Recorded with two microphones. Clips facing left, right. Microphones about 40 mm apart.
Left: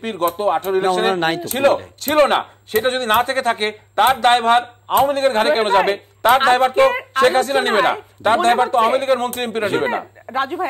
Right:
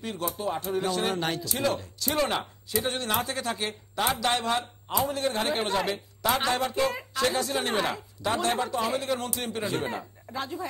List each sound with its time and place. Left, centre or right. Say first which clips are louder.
0.0 s speech: left 12 dB; left